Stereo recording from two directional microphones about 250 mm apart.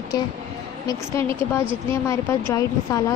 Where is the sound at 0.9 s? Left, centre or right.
Centre.